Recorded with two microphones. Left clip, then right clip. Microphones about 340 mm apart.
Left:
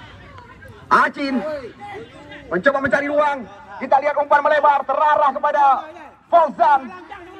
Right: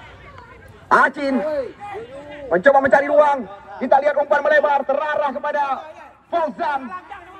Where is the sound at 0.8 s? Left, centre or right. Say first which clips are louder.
Right 1 dB; centre.